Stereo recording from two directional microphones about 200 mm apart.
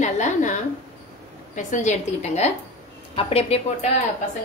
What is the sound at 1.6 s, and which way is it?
A woman's voice, 40° left (ahead or behind).